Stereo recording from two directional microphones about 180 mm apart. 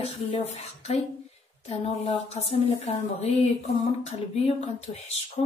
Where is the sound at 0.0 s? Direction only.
35° left (ahead or behind).